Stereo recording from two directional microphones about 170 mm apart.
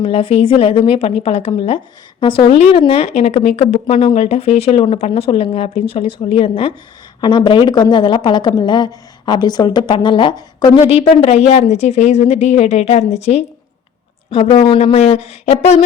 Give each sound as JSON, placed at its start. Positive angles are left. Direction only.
{"t": 0.0, "sound": "a woman's voice", "side_deg": 35}